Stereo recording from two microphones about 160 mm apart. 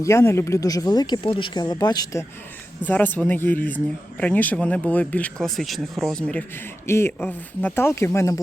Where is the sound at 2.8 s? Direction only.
10° left (ahead or behind).